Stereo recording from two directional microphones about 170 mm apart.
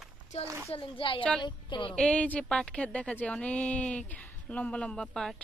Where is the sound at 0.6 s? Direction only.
30° left (ahead or behind).